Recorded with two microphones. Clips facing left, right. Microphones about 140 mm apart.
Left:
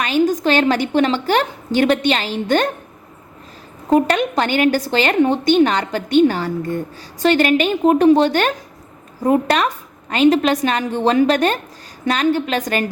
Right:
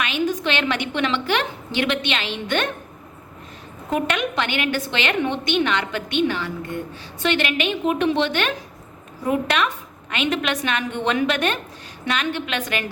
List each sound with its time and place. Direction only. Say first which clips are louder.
0.0 s a woman's voice: left 7 dB; 40° left (ahead or behind)
3.8 s a woman's voice: left 8 dB; 35° left (ahead or behind)